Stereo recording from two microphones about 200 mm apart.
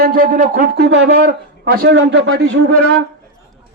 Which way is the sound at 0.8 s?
60° right (ahead or behind).